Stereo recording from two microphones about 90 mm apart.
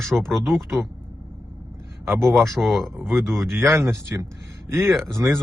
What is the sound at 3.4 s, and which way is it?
Speech, 30° right (ahead or behind).